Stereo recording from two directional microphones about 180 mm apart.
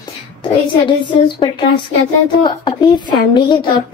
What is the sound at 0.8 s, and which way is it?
A woman's voice, 25° left (ahead or behind).